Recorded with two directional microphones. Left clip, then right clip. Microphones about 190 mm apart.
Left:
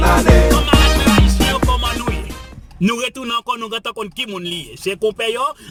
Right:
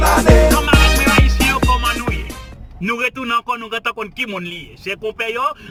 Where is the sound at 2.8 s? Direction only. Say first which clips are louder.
Right 1 dB; 25° left (ahead or behind).